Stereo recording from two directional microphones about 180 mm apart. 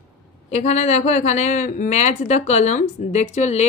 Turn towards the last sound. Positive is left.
turn(degrees=40)  # may be behind; listen again after turning